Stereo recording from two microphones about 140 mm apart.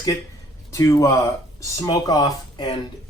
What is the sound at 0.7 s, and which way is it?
Speech, 20° left (ahead or behind).